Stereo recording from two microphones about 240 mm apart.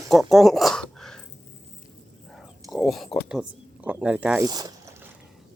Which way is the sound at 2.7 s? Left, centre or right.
Centre.